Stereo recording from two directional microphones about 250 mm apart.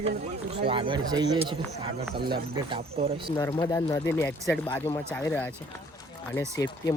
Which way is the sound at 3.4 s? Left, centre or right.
Centre.